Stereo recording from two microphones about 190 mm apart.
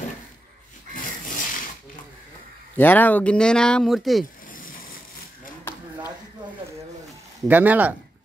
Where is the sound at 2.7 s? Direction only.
10° left (ahead or behind).